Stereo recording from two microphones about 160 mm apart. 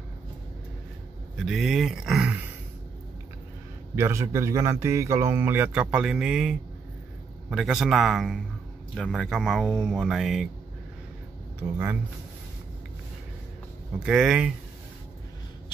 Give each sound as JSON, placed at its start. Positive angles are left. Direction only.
{"t": 1.4, "sound": "speech", "side_deg": 0}
{"t": 3.9, "sound": "speech", "side_deg": -15}
{"t": 11.6, "sound": "speech", "side_deg": -15}
{"t": 13.9, "sound": "speech", "side_deg": -5}